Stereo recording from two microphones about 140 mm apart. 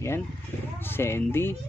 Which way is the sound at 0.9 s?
15° left (ahead or behind).